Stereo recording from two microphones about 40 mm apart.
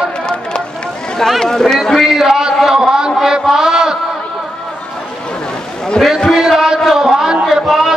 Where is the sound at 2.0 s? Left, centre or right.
Centre.